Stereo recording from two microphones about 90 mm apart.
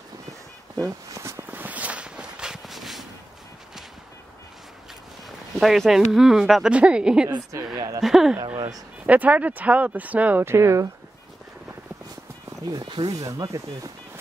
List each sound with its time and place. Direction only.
0.8 s a sound: 35° right (ahead or behind)
1.5 s walk: 20° right (ahead or behind); by 3.1 s centre (ahead or behind)
5.6 s speech: centre (ahead or behind)
7.7 s speech: 45° right (ahead or behind)
8.0 s speech: 5° right (ahead or behind)
9.0 s speech: 15° right (ahead or behind); by 10.9 s 30° right (ahead or behind)
13.0 s speech: 40° right (ahead or behind)